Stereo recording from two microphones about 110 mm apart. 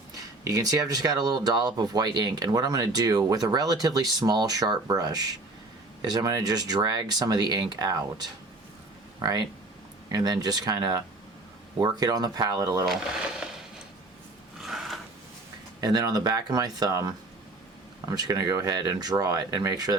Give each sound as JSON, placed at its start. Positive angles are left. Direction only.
{"t": 0.4, "sound": "speech", "side_deg": -35}
{"t": 12.9, "sound": "speech", "side_deg": -5}
{"t": 14.6, "sound": "a sound", "side_deg": 0}
{"t": 15.8, "sound": "speech", "side_deg": -35}
{"t": 18.1, "sound": "speech", "side_deg": -35}